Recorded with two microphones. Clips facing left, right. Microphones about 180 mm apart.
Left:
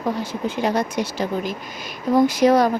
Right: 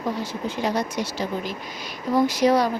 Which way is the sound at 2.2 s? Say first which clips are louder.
Left 3 dB; 50° left (ahead or behind).